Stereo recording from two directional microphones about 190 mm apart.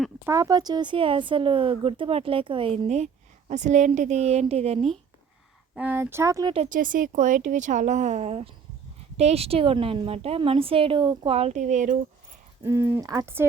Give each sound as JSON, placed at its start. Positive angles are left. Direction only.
{"t": 0.3, "sound": "a woman's voice", "side_deg": -20}
{"t": 5.7, "sound": "speech", "side_deg": -10}
{"t": 6.5, "sound": "a woman's voice", "side_deg": -40}
{"t": 12.6, "sound": "speech", "side_deg": -15}